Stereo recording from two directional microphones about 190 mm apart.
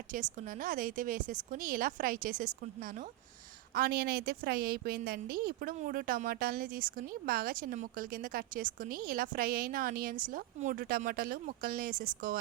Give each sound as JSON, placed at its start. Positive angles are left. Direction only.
{"t": 0.1, "sound": "a woman's voice", "side_deg": -45}